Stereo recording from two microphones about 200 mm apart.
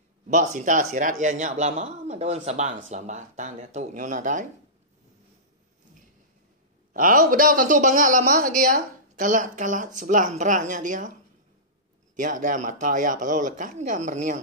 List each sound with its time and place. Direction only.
0.3 s speech: 40° right (ahead or behind)
6.9 s speech: 45° right (ahead or behind)
12.2 s speech: 40° right (ahead or behind)